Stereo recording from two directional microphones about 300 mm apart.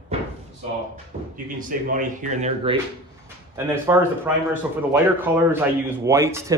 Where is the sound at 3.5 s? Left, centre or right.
Centre.